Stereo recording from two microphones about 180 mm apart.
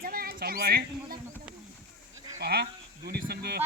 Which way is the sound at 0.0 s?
55° right (ahead or behind).